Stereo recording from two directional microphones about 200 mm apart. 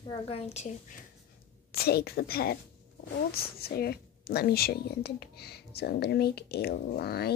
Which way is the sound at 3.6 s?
50° left (ahead or behind).